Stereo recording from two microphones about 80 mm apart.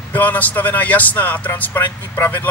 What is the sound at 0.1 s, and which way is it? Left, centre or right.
Speech, left.